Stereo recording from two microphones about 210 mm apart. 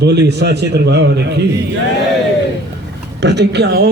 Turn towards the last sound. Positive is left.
turn(degrees=-50)  # may be behind; listen again after turning